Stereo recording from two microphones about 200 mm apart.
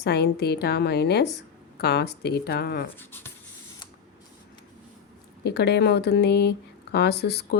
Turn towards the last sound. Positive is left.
turn(degrees=55)  # may be behind; listen again after turning